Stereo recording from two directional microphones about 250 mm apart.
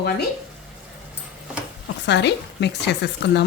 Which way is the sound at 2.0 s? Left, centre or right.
Left.